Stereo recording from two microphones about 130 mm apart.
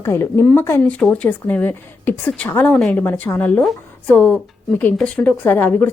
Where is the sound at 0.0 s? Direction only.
20° left (ahead or behind).